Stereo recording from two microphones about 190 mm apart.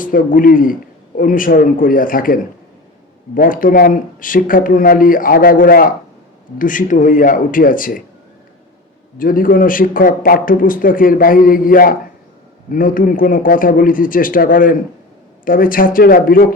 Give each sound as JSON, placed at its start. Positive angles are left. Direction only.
{"t": 0.0, "sound": "a man's voice", "side_deg": 45}
{"t": 9.1, "sound": "a man's voice", "side_deg": 45}